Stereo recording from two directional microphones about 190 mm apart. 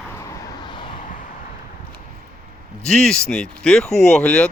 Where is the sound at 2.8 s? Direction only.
5° left (ahead or behind).